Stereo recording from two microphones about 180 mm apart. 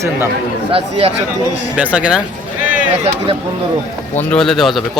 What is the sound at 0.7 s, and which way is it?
Speech, 35° right (ahead or behind).